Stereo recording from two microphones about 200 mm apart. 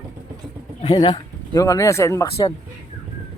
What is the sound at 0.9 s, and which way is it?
Speech, 20° left (ahead or behind).